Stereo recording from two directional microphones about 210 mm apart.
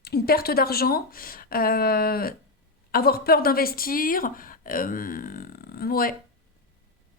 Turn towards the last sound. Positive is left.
turn(degrees=45)  # may be behind; listen again after turning